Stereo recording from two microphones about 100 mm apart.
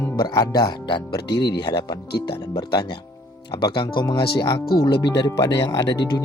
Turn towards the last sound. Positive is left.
turn(degrees=40)  # may be behind; listen again after turning